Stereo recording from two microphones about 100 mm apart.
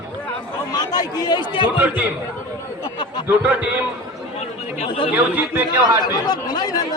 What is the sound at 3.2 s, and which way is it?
Speech, 10° right (ahead or behind).